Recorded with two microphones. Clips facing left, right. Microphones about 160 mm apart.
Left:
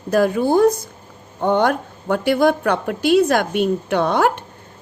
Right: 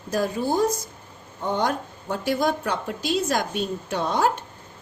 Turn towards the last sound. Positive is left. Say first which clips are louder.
# left 6 dB
turn(degrees=65)  # may be behind; listen again after turning